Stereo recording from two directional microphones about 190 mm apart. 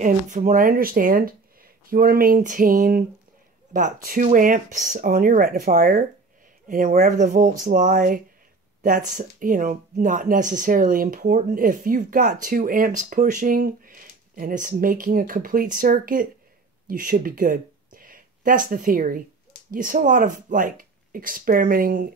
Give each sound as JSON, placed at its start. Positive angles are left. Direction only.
{"t": 0.0, "sound": "speech", "side_deg": -40}